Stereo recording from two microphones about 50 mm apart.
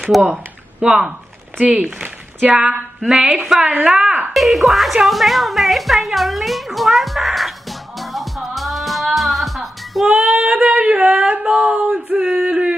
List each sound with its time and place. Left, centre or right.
0.1 s speech: centre
0.8 s a woman's voice: centre
3.8 s a sound: centre
4.3 s speech: centre
8.0 s music: centre
10.0 s female singing: right
11.3 s a sound: right
12.2 s male singing: centre